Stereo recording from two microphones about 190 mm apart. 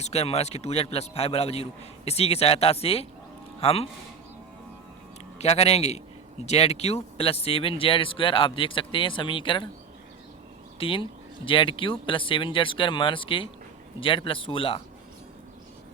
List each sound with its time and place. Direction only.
0.0 s a man's voice: 35° left (ahead or behind)
5.4 s a man's voice: 35° left (ahead or behind)
10.8 s speech: 30° left (ahead or behind)